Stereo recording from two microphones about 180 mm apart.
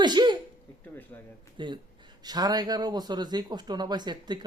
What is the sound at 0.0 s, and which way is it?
Speech, 25° right (ahead or behind).